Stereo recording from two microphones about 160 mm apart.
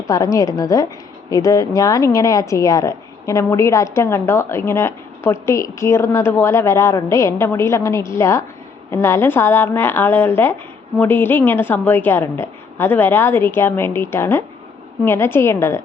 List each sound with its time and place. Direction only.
0.1 s a woman's voice: 20° left (ahead or behind)